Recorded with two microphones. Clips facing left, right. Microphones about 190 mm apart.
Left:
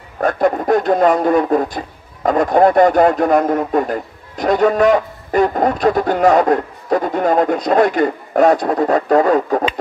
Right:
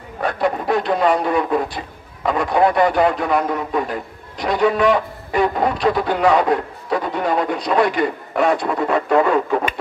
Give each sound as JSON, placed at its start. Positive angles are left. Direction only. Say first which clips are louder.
{"t": 0.2, "sound": "speech", "louder": "left 5 dB", "side_deg": 45}